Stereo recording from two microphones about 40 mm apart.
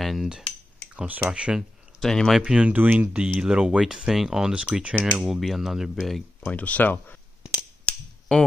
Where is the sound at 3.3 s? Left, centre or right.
Right.